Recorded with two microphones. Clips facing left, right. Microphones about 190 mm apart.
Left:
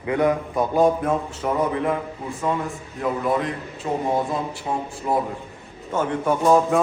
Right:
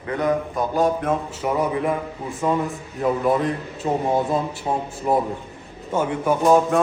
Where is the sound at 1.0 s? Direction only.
5° right (ahead or behind).